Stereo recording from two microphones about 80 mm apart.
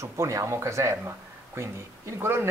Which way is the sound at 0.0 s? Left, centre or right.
Right.